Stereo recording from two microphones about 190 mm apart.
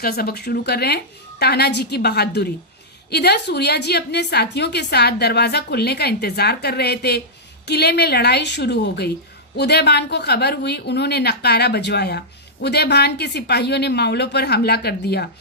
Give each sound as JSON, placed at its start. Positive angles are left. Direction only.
{"t": 0.0, "sound": "a woman's voice", "side_deg": 55}